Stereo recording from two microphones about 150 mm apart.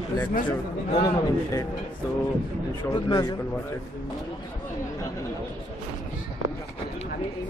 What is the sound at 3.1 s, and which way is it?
Speech, 25° left (ahead or behind).